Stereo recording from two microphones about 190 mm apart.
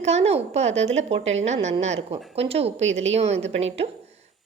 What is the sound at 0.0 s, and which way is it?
A woman's voice, 35° right (ahead or behind).